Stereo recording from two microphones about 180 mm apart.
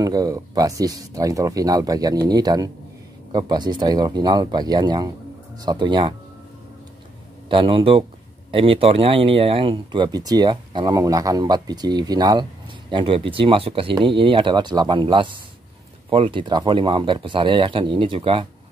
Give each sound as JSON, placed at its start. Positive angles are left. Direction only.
{"t": 0.0, "sound": "speech", "side_deg": -20}
{"t": 7.4, "sound": "speech", "side_deg": -30}